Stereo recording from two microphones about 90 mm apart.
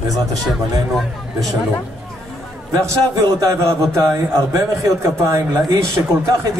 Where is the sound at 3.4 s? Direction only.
35° right (ahead or behind).